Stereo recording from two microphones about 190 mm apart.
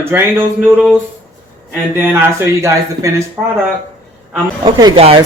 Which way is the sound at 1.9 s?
10° right (ahead or behind).